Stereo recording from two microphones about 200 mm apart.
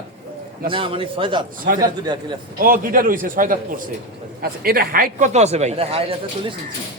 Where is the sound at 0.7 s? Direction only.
25° right (ahead or behind).